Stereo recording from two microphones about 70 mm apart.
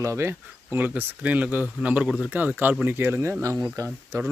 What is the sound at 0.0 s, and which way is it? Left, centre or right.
Speech, right.